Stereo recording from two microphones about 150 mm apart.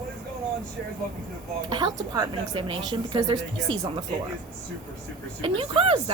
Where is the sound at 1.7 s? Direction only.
30° right (ahead or behind).